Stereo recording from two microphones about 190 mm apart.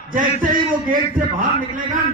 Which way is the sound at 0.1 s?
45° right (ahead or behind).